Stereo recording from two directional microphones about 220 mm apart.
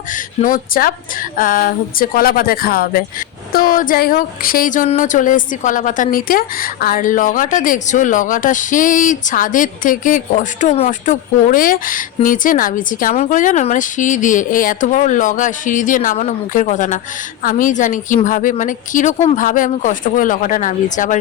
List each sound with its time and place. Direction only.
0.1 s speech: 40° left (ahead or behind)